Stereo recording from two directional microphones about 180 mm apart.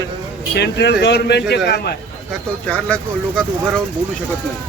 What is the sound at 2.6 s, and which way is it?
Speech, 5° left (ahead or behind).